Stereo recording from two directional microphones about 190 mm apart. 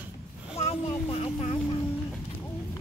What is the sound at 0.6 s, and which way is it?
Vehicle, 35° left (ahead or behind).